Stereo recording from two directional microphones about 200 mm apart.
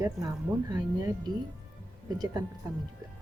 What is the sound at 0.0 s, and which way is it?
Speech, 20° right (ahead or behind).